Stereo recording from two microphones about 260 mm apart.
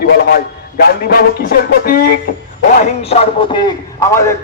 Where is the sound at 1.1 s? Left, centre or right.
Left.